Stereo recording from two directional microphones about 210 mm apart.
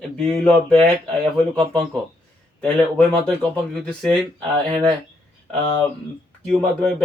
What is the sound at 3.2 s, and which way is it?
Speech, 5° left (ahead or behind).